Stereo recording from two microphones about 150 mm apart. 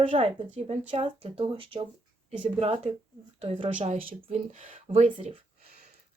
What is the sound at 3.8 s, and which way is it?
Speech, 65° right (ahead or behind).